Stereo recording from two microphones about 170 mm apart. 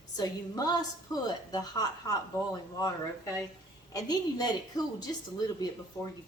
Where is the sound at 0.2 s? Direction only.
20° left (ahead or behind).